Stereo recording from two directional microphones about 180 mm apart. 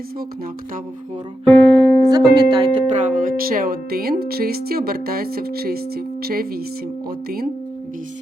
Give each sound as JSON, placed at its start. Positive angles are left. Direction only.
{"t": 1.7, "sound": "speech", "side_deg": -25}